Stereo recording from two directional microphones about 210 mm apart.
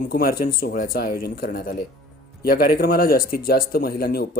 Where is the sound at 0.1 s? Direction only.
45° left (ahead or behind).